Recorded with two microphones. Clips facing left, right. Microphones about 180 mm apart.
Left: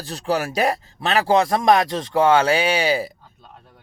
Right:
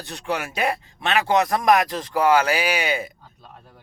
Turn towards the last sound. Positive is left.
turn(degrees=30)  # may be behind; listen again after turning